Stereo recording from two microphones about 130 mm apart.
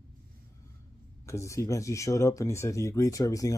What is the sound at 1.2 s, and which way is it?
Speech, 20° left (ahead or behind).